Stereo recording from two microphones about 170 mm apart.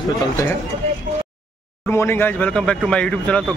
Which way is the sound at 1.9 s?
15° left (ahead or behind).